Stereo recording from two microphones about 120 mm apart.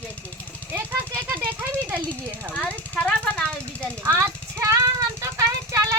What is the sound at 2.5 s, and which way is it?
Speech, 10° left (ahead or behind).